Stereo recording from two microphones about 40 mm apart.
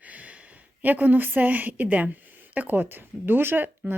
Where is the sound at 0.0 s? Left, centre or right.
Right.